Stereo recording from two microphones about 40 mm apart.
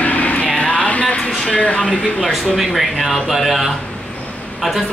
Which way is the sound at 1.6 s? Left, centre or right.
Left.